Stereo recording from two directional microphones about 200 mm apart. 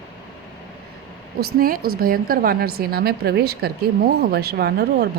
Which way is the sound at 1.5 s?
45° right (ahead or behind).